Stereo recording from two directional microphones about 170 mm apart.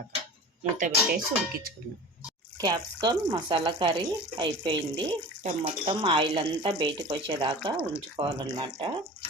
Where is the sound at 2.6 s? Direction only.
25° right (ahead or behind).